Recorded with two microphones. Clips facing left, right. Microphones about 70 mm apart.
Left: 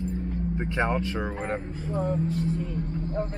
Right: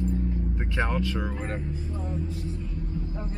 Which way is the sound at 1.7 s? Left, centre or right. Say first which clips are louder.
Left 6 dB; left.